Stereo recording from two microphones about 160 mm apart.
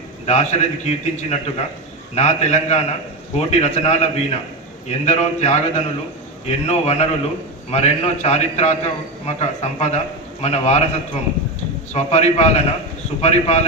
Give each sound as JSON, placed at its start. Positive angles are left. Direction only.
{"t": 0.3, "sound": "a man's voice", "side_deg": 45}